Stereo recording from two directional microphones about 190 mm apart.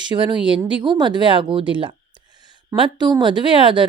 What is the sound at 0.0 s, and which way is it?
A woman's voice, 25° right (ahead or behind).